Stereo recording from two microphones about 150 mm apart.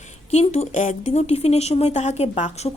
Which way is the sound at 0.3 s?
45° left (ahead or behind).